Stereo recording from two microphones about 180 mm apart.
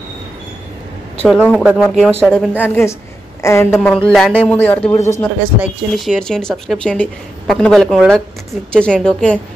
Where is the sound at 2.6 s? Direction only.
10° left (ahead or behind).